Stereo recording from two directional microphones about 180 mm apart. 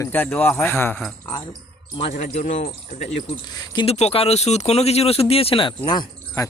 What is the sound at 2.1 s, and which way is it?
Speech, 40° left (ahead or behind).